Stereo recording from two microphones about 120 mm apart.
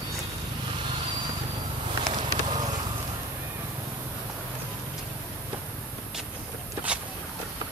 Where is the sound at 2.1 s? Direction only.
40° right (ahead or behind).